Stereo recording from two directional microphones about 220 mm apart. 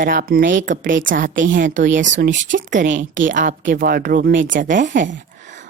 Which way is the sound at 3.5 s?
50° right (ahead or behind).